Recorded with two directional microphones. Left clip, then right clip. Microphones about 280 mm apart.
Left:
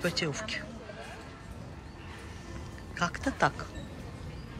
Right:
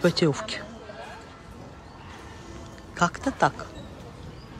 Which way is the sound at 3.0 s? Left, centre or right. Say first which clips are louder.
Right 6 dB; centre.